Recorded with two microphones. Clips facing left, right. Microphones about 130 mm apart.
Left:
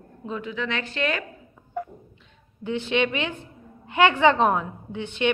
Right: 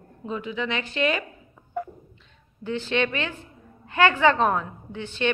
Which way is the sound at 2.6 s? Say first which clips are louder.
Left 1 dB; 15° left (ahead or behind).